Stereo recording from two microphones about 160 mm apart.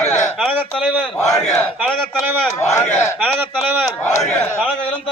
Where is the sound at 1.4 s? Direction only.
5° left (ahead or behind).